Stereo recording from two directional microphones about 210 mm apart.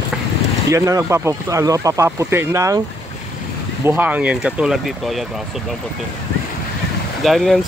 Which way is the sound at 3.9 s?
10° right (ahead or behind).